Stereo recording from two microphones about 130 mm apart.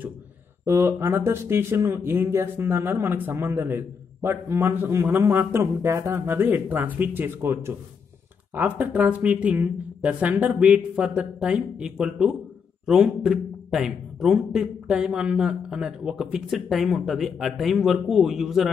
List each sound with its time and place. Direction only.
0.7 s speech: 20° right (ahead or behind); by 18.7 s centre (ahead or behind)